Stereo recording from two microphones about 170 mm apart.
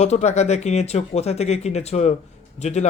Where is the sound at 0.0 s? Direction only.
40° left (ahead or behind).